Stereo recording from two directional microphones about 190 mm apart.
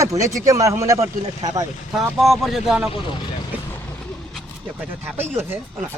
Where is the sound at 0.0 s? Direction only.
15° right (ahead or behind).